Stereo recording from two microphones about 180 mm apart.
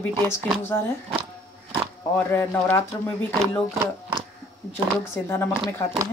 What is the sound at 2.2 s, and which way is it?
Speech, 10° left (ahead or behind).